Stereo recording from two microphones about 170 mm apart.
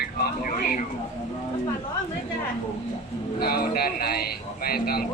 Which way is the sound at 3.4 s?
65° left (ahead or behind).